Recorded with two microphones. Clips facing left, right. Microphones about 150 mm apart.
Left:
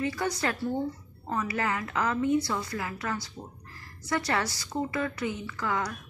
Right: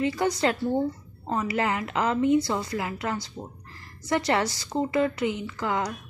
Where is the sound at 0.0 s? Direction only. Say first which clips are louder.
Right 5 dB; 20° right (ahead or behind).